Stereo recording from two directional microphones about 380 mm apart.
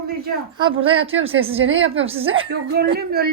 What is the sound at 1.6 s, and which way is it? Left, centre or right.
A woman's voice, right.